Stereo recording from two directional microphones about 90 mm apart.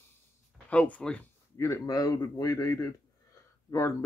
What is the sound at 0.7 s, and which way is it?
Speech, 15° left (ahead or behind).